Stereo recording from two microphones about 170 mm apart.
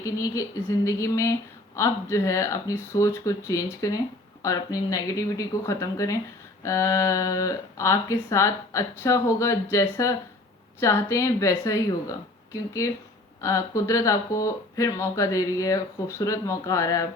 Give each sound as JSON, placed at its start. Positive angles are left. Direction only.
{"t": 0.0, "sound": "speech", "side_deg": 20}
{"t": 13.4, "sound": "speech", "side_deg": 15}